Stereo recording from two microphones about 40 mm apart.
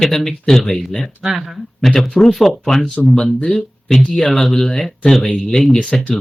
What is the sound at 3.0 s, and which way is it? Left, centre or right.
Speech, left.